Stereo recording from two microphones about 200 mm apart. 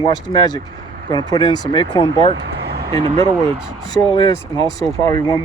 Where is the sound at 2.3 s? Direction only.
60° right (ahead or behind).